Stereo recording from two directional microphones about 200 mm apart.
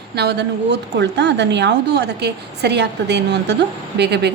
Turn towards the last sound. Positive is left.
turn(degrees=-55)  # may be behind; listen again after turning